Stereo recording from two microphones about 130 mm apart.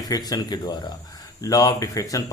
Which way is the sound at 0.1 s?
30° left (ahead or behind).